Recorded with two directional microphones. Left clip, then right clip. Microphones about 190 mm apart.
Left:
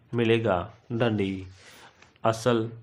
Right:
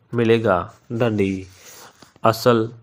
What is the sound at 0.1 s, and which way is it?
Speech, 25° right (ahead or behind).